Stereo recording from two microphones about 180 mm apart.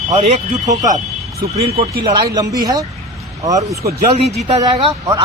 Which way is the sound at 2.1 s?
20° right (ahead or behind).